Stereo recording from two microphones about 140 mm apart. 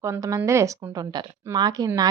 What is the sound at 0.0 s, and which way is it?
Speech, 20° right (ahead or behind).